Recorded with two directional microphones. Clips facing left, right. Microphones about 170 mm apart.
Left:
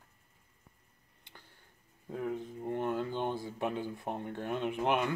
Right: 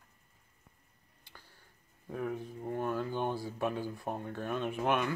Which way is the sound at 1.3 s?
20° left (ahead or behind).